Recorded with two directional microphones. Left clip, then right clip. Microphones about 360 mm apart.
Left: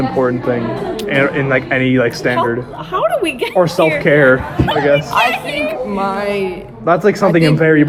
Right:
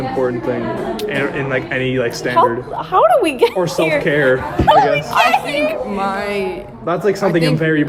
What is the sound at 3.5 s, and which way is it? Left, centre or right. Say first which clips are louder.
Speech: left 5 dB; centre.